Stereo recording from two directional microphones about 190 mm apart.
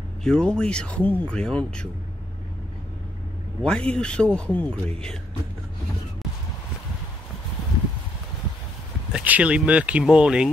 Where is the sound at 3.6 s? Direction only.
5° left (ahead or behind).